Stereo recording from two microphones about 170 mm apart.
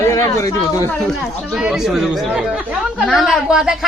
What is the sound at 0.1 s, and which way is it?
Speech, 20° left (ahead or behind).